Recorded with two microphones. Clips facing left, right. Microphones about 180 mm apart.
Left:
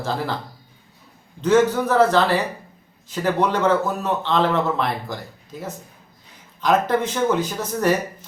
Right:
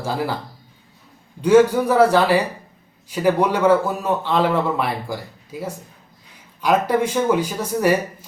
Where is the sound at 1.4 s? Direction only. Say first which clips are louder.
Right 3 dB; 10° right (ahead or behind).